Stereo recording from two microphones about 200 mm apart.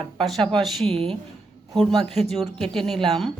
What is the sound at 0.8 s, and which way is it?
Speech, 30° right (ahead or behind).